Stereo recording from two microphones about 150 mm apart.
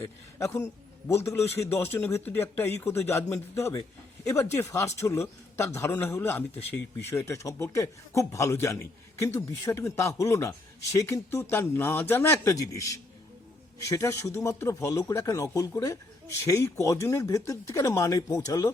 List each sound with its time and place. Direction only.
0.0 s a man's voice: 20° left (ahead or behind)